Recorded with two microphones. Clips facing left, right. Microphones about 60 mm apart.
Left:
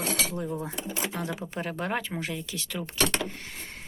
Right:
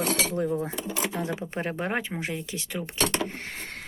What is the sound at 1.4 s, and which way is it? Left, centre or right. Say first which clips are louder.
Speech: right 2 dB; right.